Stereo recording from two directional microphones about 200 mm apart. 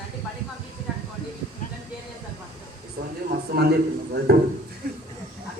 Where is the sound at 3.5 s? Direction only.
55° right (ahead or behind).